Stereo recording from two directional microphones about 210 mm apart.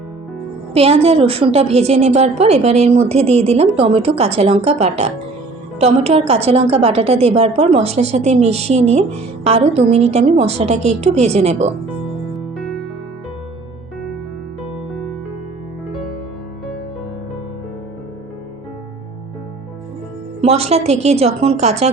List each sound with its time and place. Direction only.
0.7 s a woman's voice: 30° right (ahead or behind)
12.5 s music: centre (ahead or behind)
20.4 s a woman's voice: 30° right (ahead or behind)